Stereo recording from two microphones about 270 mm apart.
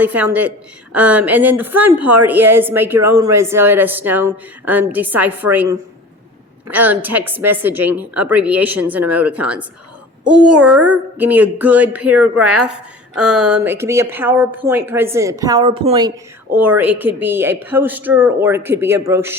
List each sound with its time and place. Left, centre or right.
0.0 s a woman's voice: centre
16.6 s a woman's voice: centre